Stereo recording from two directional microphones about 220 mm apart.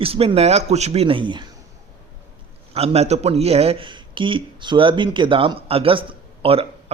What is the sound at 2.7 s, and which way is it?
Speech, 25° right (ahead or behind).